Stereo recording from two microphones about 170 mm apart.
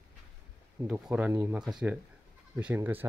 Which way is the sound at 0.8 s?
10° right (ahead or behind).